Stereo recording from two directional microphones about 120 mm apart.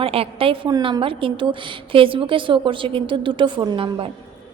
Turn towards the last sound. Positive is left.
turn(degrees=-45)  # may be behind; listen again after turning